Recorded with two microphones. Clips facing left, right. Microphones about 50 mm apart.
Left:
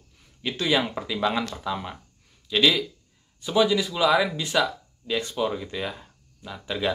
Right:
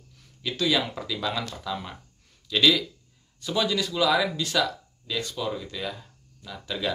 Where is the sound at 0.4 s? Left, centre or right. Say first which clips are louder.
Left 1 dB; left.